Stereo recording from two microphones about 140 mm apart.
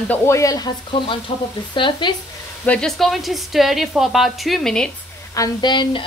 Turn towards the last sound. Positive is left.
turn(degrees=35)  # may be behind; listen again after turning